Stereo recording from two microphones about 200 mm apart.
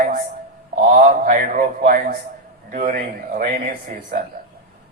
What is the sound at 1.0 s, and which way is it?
Speech, 40° right (ahead or behind).